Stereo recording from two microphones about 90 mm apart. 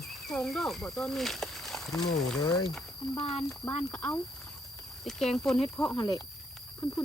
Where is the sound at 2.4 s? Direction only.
45° left (ahead or behind).